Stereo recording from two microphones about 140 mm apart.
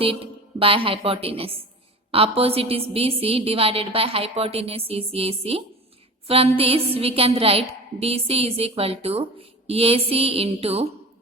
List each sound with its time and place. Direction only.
0.0 s a woman's voice: 40° right (ahead or behind)